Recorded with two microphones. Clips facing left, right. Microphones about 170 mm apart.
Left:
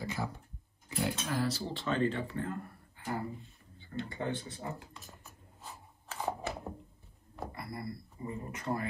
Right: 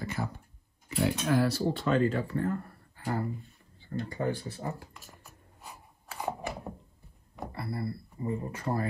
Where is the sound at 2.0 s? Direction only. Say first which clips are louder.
Right 4 dB; 25° left (ahead or behind).